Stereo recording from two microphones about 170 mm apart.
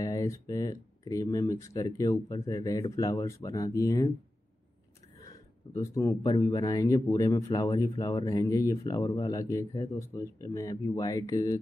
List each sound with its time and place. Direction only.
0.0 s speech: 20° left (ahead or behind)
5.2 s speech: 20° left (ahead or behind)